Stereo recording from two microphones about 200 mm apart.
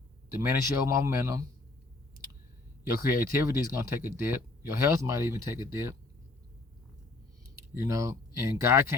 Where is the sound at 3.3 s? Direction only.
15° right (ahead or behind).